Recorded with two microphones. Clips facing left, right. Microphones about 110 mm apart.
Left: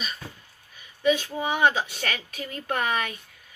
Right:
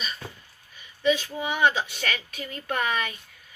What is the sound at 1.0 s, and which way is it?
Speech, 45° left (ahead or behind).